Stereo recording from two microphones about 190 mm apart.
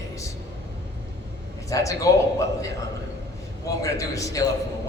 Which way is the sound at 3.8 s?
15° left (ahead or behind).